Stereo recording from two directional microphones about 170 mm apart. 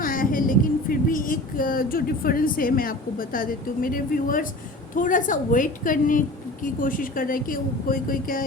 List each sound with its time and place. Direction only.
0.0 s a woman's voice: 55° left (ahead or behind)